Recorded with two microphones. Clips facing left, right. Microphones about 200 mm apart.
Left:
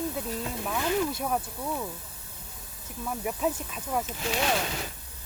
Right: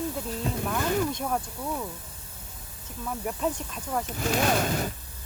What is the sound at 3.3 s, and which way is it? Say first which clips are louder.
Speech: even; 5° left (ahead or behind).